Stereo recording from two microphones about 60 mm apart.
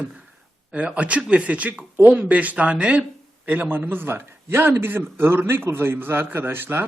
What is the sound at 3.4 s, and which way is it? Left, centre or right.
A man's voice, right.